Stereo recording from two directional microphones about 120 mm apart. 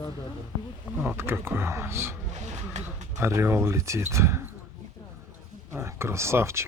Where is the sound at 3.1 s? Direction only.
20° right (ahead or behind).